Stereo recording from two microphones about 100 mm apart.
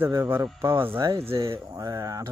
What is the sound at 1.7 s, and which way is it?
Speech, 40° right (ahead or behind).